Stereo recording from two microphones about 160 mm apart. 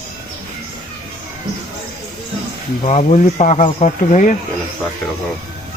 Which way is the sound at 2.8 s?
45° left (ahead or behind).